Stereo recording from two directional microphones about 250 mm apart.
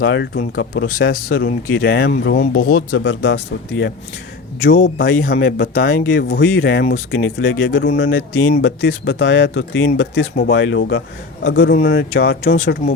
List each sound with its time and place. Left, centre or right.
0.0 s speech: left
1.1 s speech: left
1.6 s speech: left
2.7 s speech: left
4.9 s speech: left
11.7 s speech: left